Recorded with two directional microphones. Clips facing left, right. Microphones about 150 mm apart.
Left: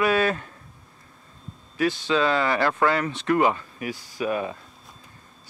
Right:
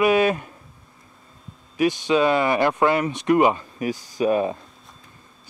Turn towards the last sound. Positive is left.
turn(degrees=-30)  # may be behind; listen again after turning